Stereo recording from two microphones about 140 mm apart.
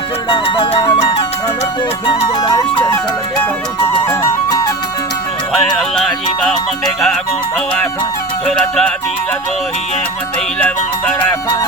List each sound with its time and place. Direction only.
0.3 s music: 40° left (ahead or behind)
2.0 s music: 35° left (ahead or behind)
4.0 s music: 20° left (ahead or behind)
6.0 s music: 5° left (ahead or behind)
8.4 s music: 5° left (ahead or behind)